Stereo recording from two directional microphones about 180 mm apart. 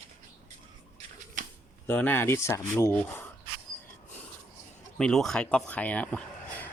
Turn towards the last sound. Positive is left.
turn(degrees=5)  # may be behind; listen again after turning